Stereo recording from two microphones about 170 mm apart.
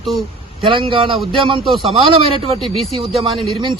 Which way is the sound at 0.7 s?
30° right (ahead or behind).